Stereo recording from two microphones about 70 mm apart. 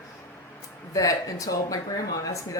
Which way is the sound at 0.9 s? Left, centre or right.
Left.